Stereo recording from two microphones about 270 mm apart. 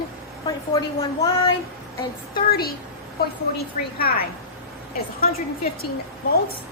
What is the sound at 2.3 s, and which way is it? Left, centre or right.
Speech, left.